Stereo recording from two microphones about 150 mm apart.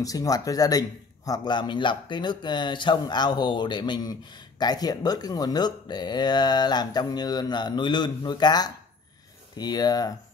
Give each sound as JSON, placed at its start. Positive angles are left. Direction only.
{"t": 0.0, "sound": "speech", "side_deg": 25}